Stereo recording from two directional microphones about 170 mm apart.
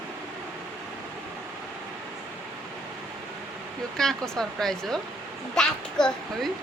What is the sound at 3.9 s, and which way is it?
Speech, 5° left (ahead or behind).